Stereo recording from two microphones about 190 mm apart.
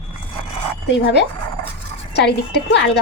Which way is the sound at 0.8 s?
70° left (ahead or behind).